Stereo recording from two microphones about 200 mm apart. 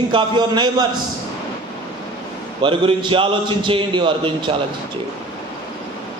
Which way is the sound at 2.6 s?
25° right (ahead or behind).